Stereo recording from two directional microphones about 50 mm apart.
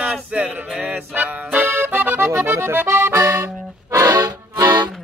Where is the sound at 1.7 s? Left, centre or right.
Right.